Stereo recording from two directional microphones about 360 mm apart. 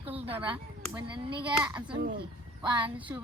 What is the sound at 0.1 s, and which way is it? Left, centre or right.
Speech, centre.